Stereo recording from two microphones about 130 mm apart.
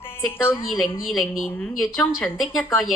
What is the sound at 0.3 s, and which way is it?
Speech, 15° left (ahead or behind).